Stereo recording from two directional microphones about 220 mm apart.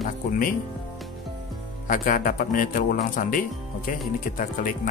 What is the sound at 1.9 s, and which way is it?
Speech, 35° left (ahead or behind).